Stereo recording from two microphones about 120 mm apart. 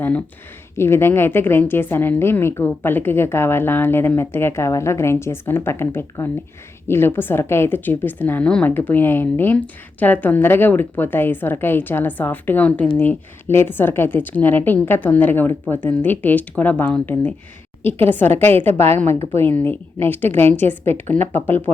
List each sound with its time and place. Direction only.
0.0 s a woman's voice: 10° left (ahead or behind)